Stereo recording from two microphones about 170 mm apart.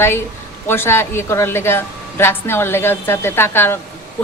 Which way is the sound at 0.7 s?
15° left (ahead or behind).